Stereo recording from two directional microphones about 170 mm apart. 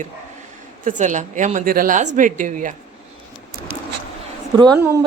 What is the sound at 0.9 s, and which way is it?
A woman's voice, 45° right (ahead or behind).